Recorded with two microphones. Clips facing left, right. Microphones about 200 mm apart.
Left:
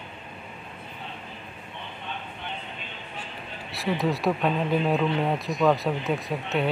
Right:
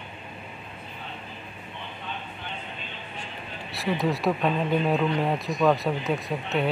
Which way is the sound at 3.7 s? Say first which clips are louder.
Even; centre (ahead or behind).